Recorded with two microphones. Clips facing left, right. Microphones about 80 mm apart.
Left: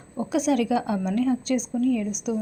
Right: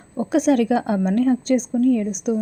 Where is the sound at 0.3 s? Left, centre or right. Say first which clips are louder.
Right 5 dB; right.